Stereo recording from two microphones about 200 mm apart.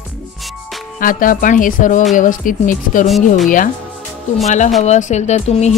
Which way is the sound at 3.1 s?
Centre (ahead or behind).